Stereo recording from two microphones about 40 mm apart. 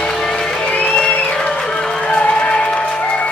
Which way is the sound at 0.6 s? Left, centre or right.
Left.